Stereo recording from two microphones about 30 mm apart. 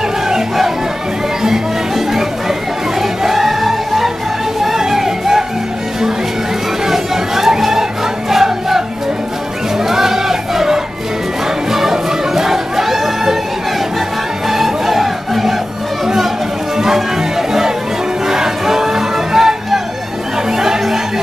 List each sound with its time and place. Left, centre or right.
1.4 s music: centre
6.9 s chatter: centre
8.3 s music: centre
9.8 s crowd: centre
11.7 s music: centre
14.5 s music: centre
16.7 s music: centre
20.5 s chatter: centre